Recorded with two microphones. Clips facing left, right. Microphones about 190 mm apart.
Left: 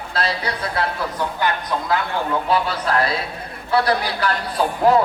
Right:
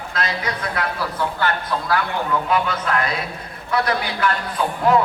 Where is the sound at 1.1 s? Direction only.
15° left (ahead or behind).